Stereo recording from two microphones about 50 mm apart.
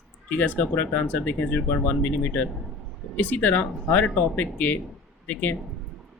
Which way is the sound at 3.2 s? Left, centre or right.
Left.